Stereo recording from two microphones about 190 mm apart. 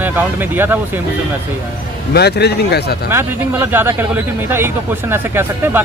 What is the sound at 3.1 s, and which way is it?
Speech, 10° right (ahead or behind).